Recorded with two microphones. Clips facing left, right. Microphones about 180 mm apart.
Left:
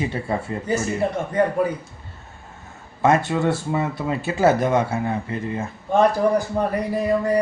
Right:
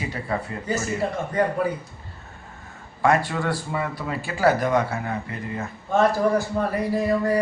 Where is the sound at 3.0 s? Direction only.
20° left (ahead or behind).